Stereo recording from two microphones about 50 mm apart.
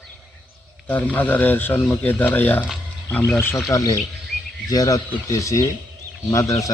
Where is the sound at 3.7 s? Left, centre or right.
Left.